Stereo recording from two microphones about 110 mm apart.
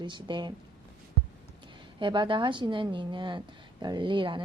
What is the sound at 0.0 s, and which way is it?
Speech, 45° right (ahead or behind).